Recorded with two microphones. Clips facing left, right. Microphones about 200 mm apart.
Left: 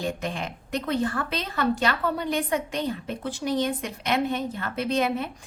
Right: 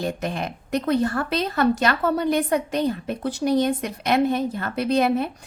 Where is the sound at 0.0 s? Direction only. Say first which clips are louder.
Right 3 dB; 40° right (ahead or behind).